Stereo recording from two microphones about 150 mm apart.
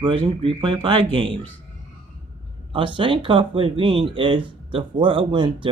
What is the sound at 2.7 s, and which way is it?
Speech, 35° right (ahead or behind).